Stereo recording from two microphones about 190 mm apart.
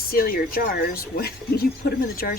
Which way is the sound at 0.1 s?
50° left (ahead or behind).